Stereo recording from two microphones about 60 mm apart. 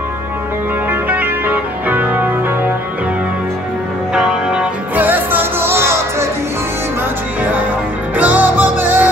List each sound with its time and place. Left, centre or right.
0.8 s music: right
4.1 s music: centre
4.9 s music: right
8.2 s music: right